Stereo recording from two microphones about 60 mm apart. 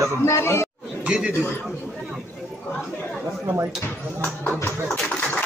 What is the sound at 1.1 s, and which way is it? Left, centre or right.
Speech, centre.